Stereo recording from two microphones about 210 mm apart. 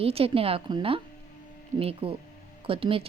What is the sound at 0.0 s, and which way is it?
Speech, 30° right (ahead or behind).